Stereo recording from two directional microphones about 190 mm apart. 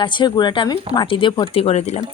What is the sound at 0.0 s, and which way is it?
Speech, 25° left (ahead or behind).